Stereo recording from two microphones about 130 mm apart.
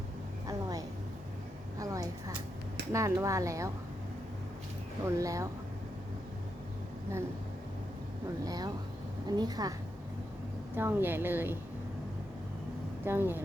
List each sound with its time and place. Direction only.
0.4 s a sound: 30° right (ahead or behind)
2.9 s a woman's voice: 25° right (ahead or behind)
5.0 s a woman's voice: 25° right (ahead or behind)
8.4 s a woman's voice: 30° right (ahead or behind)
10.8 s a woman's voice: 15° right (ahead or behind)
13.1 s a woman's voice: 15° right (ahead or behind)